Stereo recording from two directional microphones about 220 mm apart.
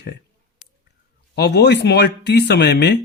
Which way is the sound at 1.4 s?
50° left (ahead or behind).